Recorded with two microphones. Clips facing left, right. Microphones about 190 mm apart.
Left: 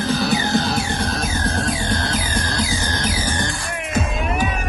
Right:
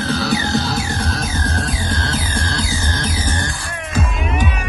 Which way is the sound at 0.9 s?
55° left (ahead or behind).